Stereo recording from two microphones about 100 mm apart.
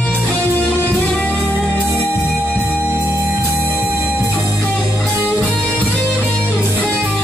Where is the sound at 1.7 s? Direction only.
20° right (ahead or behind).